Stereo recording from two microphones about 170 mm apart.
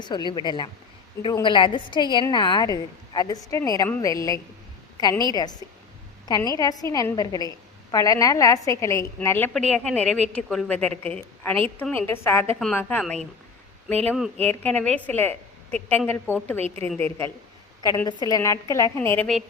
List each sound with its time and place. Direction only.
0.0 s a woman's voice: 25° left (ahead or behind); by 13.1 s 5° left (ahead or behind)
14.6 s a woman's voice: 10° left (ahead or behind)